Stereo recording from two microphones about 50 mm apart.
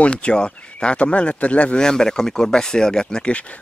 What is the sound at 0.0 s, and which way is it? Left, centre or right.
Speech, left.